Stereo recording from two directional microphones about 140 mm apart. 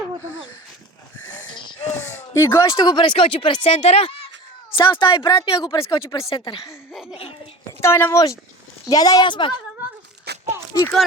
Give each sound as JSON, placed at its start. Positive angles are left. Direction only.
{"t": 1.5, "sound": "a sound", "side_deg": 35}
{"t": 1.8, "sound": "speech", "side_deg": 15}
{"t": 4.8, "sound": "speech", "side_deg": 35}
{"t": 6.9, "sound": "laughter", "side_deg": -5}
{"t": 7.8, "sound": "a woman's voice", "side_deg": 15}